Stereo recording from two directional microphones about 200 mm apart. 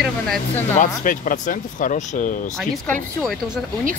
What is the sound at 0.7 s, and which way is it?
Speech, 40° left (ahead or behind).